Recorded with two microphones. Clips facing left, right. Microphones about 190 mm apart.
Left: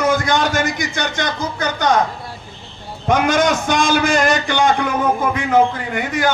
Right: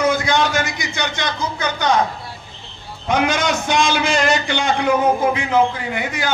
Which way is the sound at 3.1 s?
45° left (ahead or behind).